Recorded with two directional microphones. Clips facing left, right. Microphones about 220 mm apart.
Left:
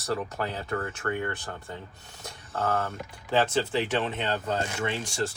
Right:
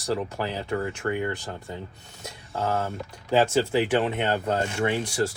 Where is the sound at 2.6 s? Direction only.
25° right (ahead or behind).